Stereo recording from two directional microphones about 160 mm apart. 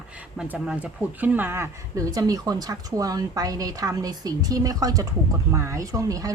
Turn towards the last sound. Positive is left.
turn(degrees=-20)  # may be behind; listen again after turning